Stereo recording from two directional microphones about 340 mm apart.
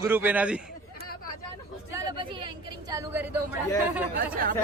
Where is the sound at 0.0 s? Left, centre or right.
Centre.